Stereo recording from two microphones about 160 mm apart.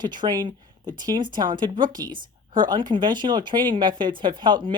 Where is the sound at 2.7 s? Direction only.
30° right (ahead or behind).